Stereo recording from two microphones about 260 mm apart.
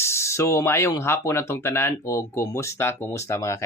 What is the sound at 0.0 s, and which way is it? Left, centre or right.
Speech, centre.